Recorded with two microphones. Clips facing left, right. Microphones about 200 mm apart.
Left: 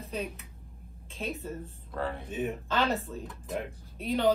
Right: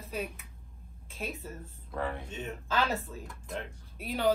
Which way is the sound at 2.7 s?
Centre (ahead or behind).